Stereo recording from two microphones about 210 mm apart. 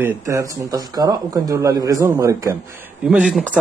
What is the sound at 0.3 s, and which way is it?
A man's voice, 15° right (ahead or behind).